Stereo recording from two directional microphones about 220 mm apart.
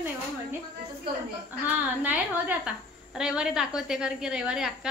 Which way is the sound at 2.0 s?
5° right (ahead or behind).